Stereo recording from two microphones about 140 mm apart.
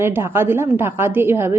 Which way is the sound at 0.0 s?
15° right (ahead or behind).